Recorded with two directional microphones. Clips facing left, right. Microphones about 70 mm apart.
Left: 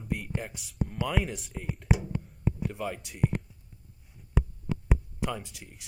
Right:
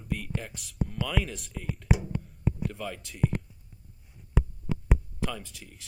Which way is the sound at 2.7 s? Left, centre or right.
Centre.